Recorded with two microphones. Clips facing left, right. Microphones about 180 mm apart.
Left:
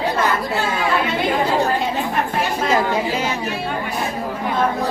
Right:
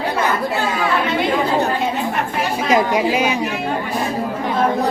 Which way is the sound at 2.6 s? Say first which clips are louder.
Right 4 dB; 15° right (ahead or behind).